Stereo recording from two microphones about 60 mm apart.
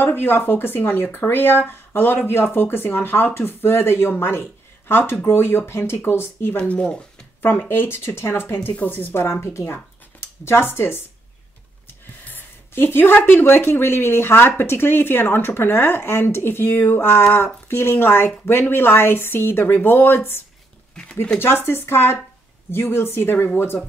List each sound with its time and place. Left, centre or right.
0.0 s speech: left
6.5 s speech: centre
7.4 s speech: left
12.3 s speech: left
20.9 s a sound: centre
21.4 s speech: left